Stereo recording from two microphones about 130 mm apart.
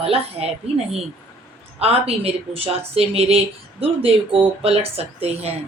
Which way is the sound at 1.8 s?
50° right (ahead or behind).